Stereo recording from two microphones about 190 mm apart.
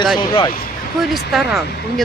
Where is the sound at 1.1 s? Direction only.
Centre (ahead or behind).